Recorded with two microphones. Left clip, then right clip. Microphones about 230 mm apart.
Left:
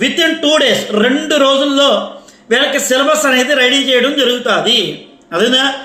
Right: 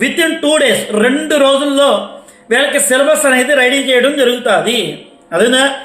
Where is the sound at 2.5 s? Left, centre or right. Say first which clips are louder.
Right 1 dB; centre.